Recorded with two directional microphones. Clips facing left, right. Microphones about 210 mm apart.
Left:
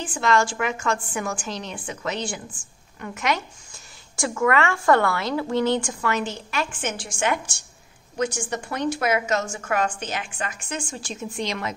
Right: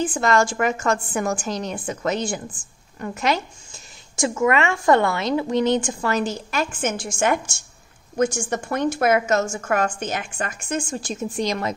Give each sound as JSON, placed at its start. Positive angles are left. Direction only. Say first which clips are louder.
{"t": 0.0, "sound": "a woman's voice", "louder": "right 3 dB", "side_deg": -40}
{"t": 3.0, "sound": "a woman's voice", "louder": "right 3 dB", "side_deg": -30}
{"t": 4.2, "sound": "a woman's voice", "louder": "right 2 dB", "side_deg": -20}
{"t": 6.0, "sound": "a woman's voice", "louder": "right 3 dB", "side_deg": -40}
{"t": 8.4, "sound": "a woman's voice", "louder": "right 4 dB", "side_deg": -45}